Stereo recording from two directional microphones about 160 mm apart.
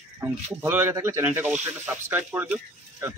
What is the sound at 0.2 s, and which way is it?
Speech, 15° right (ahead or behind).